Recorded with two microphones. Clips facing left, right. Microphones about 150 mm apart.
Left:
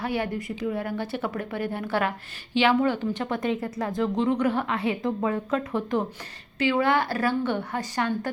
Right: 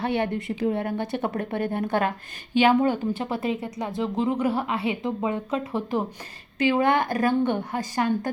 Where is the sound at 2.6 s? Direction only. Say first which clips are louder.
Right 2 dB; 15° right (ahead or behind).